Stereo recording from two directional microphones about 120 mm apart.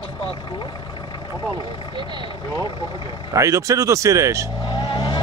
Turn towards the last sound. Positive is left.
turn(degrees=35)  # may be behind; listen again after turning